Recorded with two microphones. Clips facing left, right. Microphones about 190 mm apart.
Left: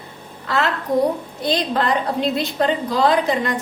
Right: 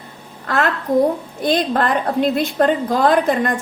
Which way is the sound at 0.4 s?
50° right (ahead or behind).